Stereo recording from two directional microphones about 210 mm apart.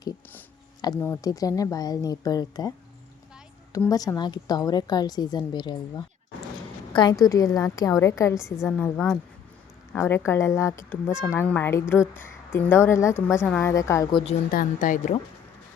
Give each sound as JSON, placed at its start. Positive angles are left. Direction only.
{"t": 0.0, "sound": "a woman's voice", "side_deg": 20}
{"t": 14.5, "sound": "speech", "side_deg": 40}